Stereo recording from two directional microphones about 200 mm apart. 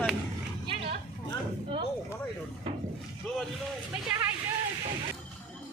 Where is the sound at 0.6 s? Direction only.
30° right (ahead or behind).